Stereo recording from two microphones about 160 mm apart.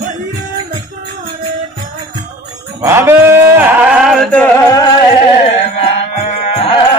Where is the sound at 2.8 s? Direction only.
15° right (ahead or behind).